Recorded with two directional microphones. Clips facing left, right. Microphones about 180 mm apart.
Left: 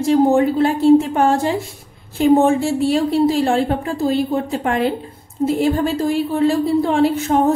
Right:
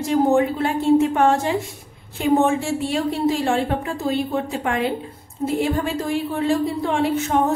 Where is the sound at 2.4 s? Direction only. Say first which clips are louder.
Left 4 dB; 35° left (ahead or behind).